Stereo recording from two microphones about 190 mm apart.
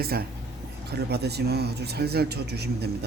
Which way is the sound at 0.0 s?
55° right (ahead or behind).